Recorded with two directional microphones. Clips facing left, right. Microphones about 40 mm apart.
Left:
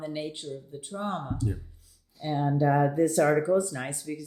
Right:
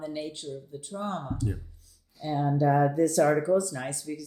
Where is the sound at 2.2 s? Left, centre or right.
Left.